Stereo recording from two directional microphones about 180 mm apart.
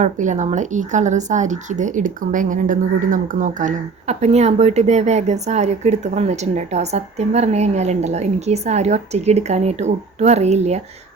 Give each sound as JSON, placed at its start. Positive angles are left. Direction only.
{"t": 0.0, "sound": "a woman's voice", "side_deg": -40}